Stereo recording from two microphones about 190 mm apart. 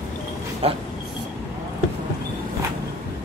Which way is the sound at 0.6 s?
30° right (ahead or behind).